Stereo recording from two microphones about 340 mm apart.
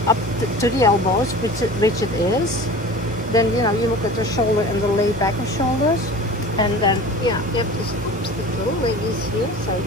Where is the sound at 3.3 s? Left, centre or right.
Centre.